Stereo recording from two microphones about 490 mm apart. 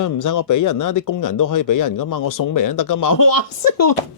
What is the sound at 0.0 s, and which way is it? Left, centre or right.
A woman's voice, left.